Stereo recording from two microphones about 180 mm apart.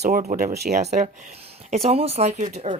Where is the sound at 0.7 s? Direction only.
40° right (ahead or behind).